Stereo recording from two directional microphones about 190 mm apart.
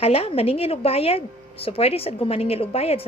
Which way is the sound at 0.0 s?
30° left (ahead or behind).